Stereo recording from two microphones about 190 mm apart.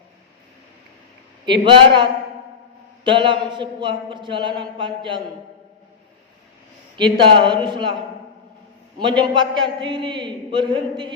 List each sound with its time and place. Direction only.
1.6 s a man's voice: 25° right (ahead or behind)
6.9 s a man's voice: 25° right (ahead or behind)
9.0 s a man's voice: 25° right (ahead or behind)